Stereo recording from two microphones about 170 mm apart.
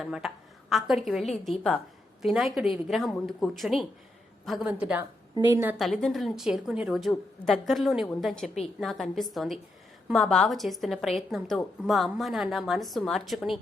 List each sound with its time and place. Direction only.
0.0 s a woman's voice: centre (ahead or behind)
5.3 s a woman's voice: 25° left (ahead or behind)
5.8 s a woman's voice: centre (ahead or behind)